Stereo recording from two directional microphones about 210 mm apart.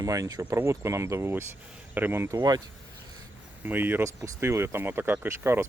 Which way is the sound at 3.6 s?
10° right (ahead or behind).